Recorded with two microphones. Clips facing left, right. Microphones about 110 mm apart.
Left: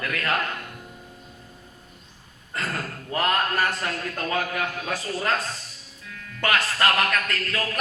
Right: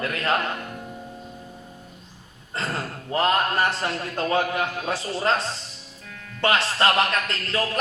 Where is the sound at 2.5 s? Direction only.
25° right (ahead or behind).